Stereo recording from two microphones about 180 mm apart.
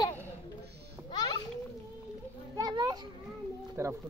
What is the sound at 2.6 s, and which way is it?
Children playing, 20° right (ahead or behind).